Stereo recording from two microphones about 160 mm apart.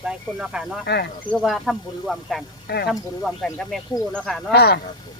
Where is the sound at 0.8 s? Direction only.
90° left.